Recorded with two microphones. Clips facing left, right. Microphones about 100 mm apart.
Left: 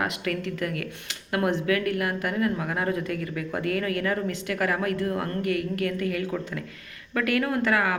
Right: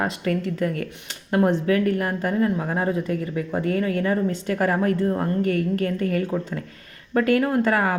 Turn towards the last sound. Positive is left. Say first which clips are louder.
# right 4 dB
turn(degrees=-35)  # may be behind; listen again after turning